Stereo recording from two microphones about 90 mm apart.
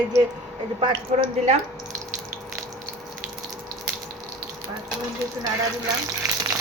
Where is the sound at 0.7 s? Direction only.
70° right (ahead or behind).